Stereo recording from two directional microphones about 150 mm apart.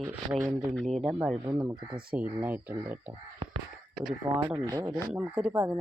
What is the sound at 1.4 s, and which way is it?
Speech, 20° right (ahead or behind).